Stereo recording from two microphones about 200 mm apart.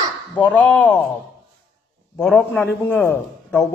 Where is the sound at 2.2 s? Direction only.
Centre (ahead or behind).